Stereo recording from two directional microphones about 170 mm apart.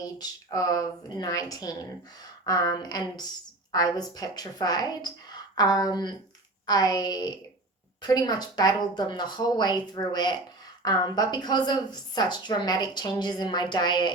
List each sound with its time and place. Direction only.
0.0 s speech: 20° left (ahead or behind)